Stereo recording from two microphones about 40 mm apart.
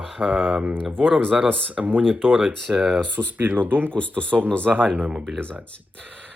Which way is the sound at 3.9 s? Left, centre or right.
Left.